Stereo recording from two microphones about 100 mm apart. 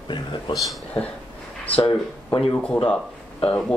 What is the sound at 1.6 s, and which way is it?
Speech, 15° left (ahead or behind).